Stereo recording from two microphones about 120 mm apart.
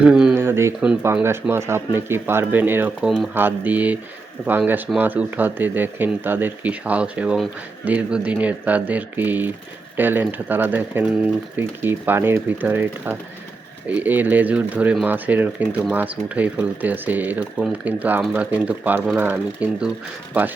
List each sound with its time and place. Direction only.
0.0 s speech: 5° right (ahead or behind)
0.3 s a sound: 20° right (ahead or behind)
1.2 s speech: 20° right (ahead or behind)